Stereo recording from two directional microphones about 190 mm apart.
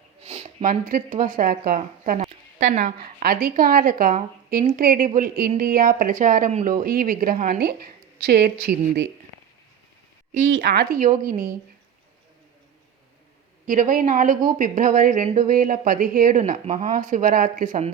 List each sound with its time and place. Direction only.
0.3 s speech: 35° right (ahead or behind); by 9.0 s 55° right (ahead or behind)
10.5 s speech: 60° right (ahead or behind)
13.7 s speech: 45° right (ahead or behind)